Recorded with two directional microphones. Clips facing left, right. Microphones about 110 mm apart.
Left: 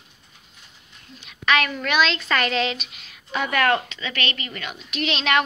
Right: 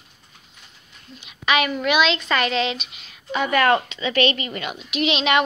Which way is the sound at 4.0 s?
20° right (ahead or behind).